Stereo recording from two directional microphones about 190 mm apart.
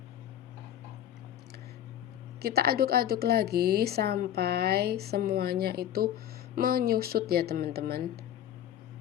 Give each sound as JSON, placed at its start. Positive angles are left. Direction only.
{"t": 2.4, "sound": "a woman's voice", "side_deg": -55}